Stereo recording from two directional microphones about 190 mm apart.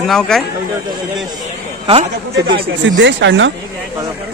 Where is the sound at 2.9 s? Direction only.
70° right (ahead or behind).